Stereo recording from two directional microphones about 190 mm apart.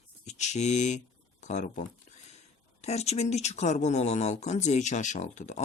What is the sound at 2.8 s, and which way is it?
Speech, 35° left (ahead or behind).